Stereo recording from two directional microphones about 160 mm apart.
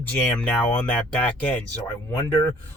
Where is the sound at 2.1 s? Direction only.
20° left (ahead or behind).